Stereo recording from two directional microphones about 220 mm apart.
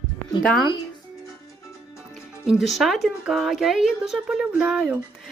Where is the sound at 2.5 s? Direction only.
Centre (ahead or behind).